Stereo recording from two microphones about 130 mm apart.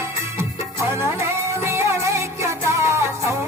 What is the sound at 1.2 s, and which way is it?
Music, 20° right (ahead or behind).